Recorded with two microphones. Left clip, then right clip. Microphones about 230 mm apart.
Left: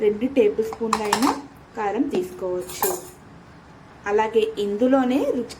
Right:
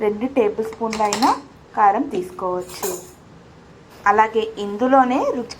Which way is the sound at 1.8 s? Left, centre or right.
Centre.